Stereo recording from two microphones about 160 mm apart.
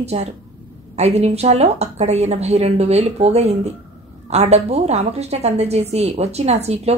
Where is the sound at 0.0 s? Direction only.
40° right (ahead or behind).